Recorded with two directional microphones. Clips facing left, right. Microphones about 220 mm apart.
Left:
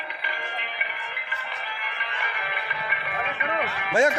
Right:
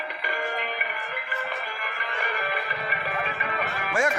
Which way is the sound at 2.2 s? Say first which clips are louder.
Right 5 dB; 40° right (ahead or behind).